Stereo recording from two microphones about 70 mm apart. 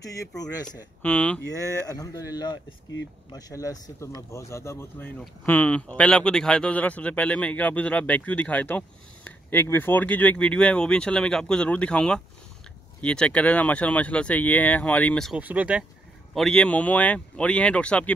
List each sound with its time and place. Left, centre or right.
0.4 s a man's voice: left
1.0 s speech: left
1.9 s a man's voice: left
3.3 s speech: left
4.3 s speech: left
5.4 s speech: left
15.3 s speech: right
16.3 s speech: centre